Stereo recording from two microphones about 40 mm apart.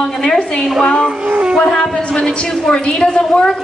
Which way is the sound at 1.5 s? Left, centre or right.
Centre.